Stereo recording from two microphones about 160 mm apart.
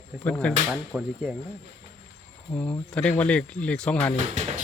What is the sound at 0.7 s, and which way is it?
Speech, 5° right (ahead or behind).